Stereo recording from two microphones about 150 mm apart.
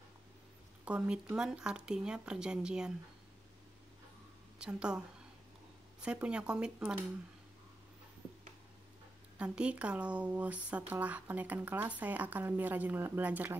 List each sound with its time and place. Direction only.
0.8 s speech: 5° right (ahead or behind)
4.6 s a woman's voice: 5° right (ahead or behind)
6.0 s speech: 5° right (ahead or behind)
9.4 s speech: 10° right (ahead or behind)